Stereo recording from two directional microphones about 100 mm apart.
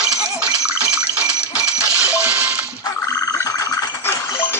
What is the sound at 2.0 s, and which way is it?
Coin, 15° right (ahead or behind).